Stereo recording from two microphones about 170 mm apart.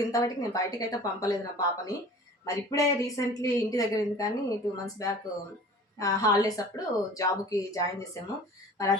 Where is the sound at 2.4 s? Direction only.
20° left (ahead or behind).